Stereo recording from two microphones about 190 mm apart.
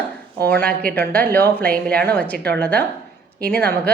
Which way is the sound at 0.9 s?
50° right (ahead or behind).